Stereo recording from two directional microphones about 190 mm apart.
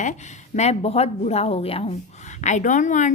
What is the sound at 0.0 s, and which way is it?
A woman's voice, 40° left (ahead or behind).